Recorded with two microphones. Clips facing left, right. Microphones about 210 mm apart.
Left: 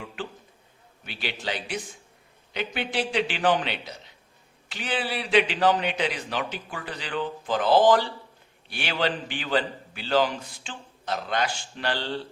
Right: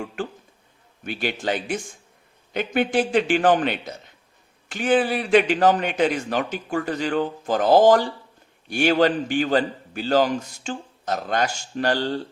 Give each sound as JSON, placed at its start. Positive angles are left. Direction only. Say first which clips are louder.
{"t": 0.2, "sound": "a man's voice", "louder": "right 6 dB", "side_deg": -45}